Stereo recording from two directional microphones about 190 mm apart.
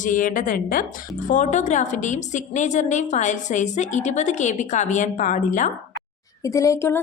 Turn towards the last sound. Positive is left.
turn(degrees=15)  # may be behind; listen again after turning